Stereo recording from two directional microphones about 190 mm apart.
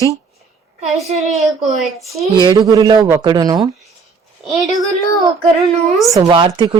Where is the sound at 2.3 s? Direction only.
20° right (ahead or behind).